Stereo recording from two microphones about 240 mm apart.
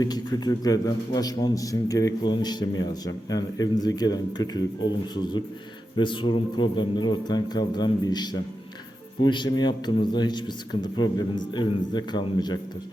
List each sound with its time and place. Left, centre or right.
0.0 s a man's voice: centre